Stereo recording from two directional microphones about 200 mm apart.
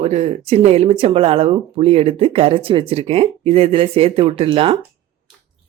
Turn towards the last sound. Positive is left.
turn(degrees=-25)  # may be behind; listen again after turning